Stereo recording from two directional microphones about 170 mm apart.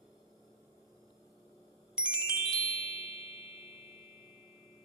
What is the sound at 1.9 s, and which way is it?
Music, 5° right (ahead or behind).